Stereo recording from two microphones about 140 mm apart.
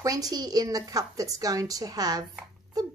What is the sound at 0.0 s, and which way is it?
Speech, 25° right (ahead or behind).